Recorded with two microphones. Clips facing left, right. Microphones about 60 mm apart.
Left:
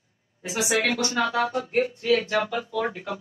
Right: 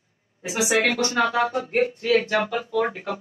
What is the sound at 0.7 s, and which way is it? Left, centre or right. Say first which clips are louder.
Speech: right 3 dB; right.